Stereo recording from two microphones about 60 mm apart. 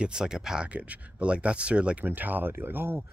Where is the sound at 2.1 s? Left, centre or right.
Right.